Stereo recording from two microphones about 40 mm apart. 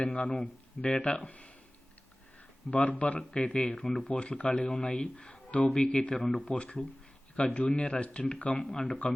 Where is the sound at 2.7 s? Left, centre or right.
Left.